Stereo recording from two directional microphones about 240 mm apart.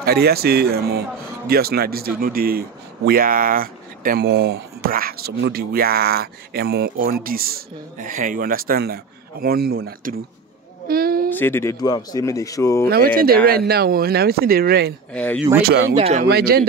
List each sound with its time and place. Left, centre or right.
0.0 s speech: right
10.9 s a sound: right
11.2 s speech: centre
12.9 s speech: right
15.1 s speech: centre
15.6 s speech: right
16.0 s a man's voice: right
16.3 s speech: right